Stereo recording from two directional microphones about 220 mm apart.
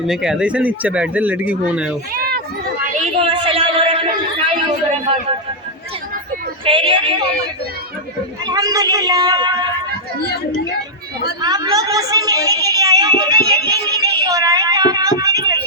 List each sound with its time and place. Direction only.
0.1 s speech: 5° right (ahead or behind)
2.1 s run: 45° right (ahead or behind)
3.0 s a sound: 25° right (ahead or behind)
6.7 s speech: 25° right (ahead or behind)
8.4 s a woman's voice: 15° right (ahead or behind)
11.4 s a woman's voice: 15° right (ahead or behind)
14.0 s a sound: 15° right (ahead or behind)